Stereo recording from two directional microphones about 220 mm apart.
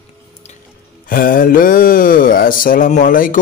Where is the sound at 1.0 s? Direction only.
40° left (ahead or behind).